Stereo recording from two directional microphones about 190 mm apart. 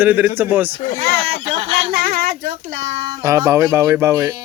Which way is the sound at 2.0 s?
50° right (ahead or behind).